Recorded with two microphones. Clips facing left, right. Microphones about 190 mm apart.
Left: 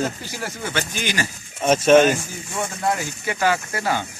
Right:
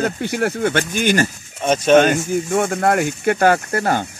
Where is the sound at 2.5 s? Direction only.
60° right (ahead or behind).